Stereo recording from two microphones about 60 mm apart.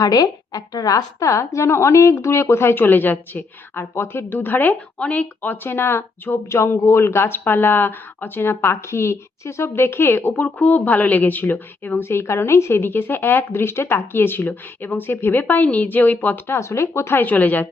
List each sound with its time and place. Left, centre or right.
0.0 s a woman's voice: left
16.6 s a woman's voice: left
17.2 s speech: left